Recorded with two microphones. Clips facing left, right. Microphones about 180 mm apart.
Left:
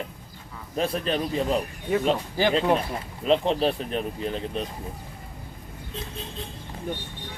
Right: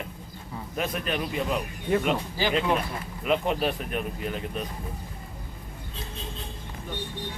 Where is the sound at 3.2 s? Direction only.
30° left (ahead or behind).